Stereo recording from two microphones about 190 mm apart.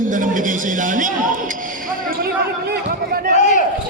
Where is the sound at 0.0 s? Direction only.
45° right (ahead or behind).